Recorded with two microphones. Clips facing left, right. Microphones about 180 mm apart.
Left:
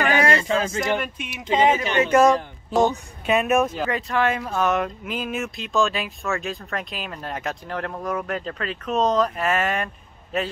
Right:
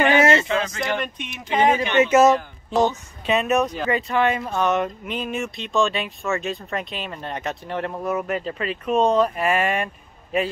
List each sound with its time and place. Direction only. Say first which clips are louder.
0.0 s male singing: right 3 dB; 25° right (ahead or behind)
0.5 s a sound: left 1 dB; 40° left (ahead or behind)
0.9 s speech: left 1 dB; 5° left (ahead or behind)
2.0 s speech: left 1 dB; 5° right (ahead or behind)